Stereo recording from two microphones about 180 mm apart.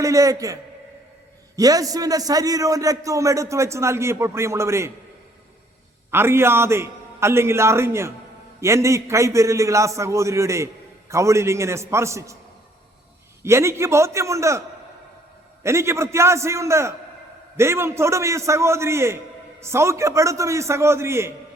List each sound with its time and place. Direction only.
0.0 s a man's voice: 15° right (ahead or behind)
6.1 s a man's voice: 15° right (ahead or behind)
13.4 s a man's voice: 15° right (ahead or behind)
15.6 s a man's voice: 15° right (ahead or behind)